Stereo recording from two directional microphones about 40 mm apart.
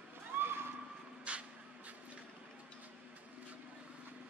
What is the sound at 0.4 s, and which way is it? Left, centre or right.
Neigh, right.